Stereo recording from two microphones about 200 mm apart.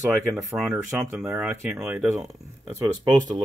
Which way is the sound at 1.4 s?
Centre (ahead or behind).